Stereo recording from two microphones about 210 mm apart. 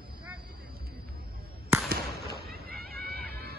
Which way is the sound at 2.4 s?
45° right (ahead or behind).